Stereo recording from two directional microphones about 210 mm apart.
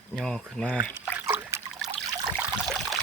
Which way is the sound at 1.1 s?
10° right (ahead or behind).